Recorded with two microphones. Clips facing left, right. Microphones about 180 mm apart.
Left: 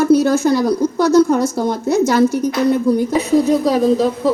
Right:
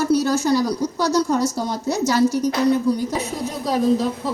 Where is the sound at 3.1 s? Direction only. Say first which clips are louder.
Left 12 dB; 85° left.